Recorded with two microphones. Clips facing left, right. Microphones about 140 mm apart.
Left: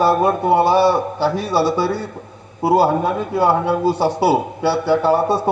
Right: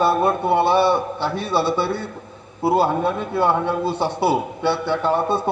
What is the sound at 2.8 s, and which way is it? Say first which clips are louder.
Speech: left 3 dB; 10° left (ahead or behind).